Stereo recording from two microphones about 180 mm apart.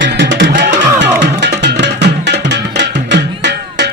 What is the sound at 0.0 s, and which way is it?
Music, 75° right (ahead or behind).